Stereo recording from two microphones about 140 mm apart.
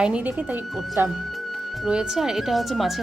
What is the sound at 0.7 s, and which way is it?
Speech, centre (ahead or behind).